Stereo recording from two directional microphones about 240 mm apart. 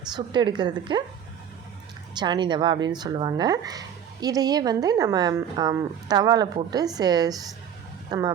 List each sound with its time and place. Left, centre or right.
0.3 s speech: centre
2.1 s speech: centre